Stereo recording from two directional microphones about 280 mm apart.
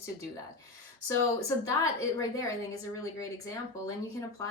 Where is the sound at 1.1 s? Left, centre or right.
Centre.